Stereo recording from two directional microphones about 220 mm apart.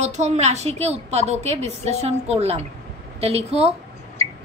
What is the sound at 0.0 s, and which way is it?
A woman's voice, 30° right (ahead or behind).